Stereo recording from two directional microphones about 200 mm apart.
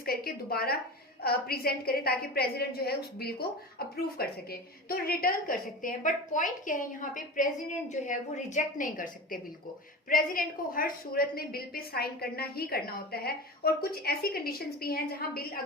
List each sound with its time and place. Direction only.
0.0 s a woman's voice: 50° left (ahead or behind)